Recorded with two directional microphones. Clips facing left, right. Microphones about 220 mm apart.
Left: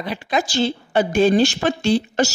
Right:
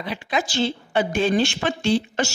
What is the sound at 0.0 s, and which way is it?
A woman's voice, 40° left (ahead or behind).